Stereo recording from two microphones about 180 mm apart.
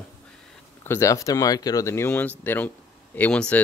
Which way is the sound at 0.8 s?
15° left (ahead or behind).